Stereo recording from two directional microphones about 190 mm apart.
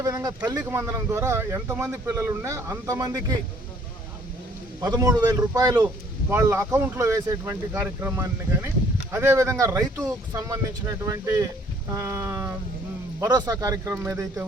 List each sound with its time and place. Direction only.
0.0 s a sound: 15° right (ahead or behind)
0.5 s speech: 10° right (ahead or behind)
4.8 s a man's voice: 20° right (ahead or behind)